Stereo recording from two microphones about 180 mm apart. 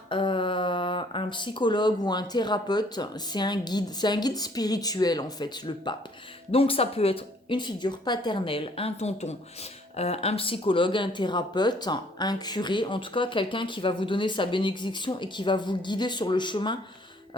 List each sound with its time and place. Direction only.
0.1 s speech: 30° left (ahead or behind)